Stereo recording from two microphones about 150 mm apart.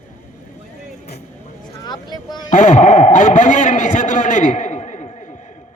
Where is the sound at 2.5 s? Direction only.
55° left (ahead or behind).